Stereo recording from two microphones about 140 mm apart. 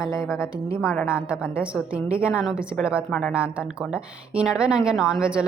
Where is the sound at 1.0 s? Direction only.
10° right (ahead or behind).